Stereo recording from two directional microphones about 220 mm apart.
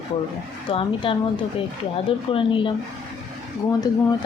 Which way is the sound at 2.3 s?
25° left (ahead or behind).